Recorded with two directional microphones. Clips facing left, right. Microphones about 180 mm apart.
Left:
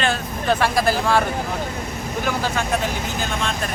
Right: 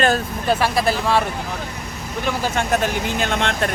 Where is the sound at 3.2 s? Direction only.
65° right (ahead or behind).